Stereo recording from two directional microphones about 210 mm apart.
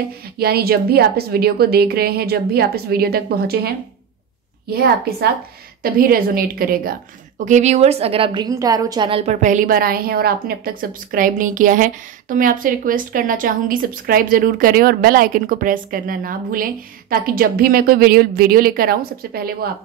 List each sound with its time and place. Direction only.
0.4 s a woman's voice: 50° right (ahead or behind)